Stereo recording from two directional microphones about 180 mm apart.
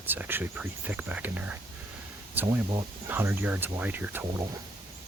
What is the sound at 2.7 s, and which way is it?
Speech, 25° right (ahead or behind).